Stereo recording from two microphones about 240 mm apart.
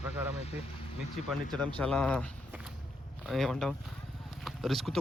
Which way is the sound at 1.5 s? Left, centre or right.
Centre.